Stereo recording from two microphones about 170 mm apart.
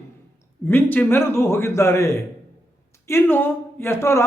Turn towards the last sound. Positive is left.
turn(degrees=15)  # may be behind; listen again after turning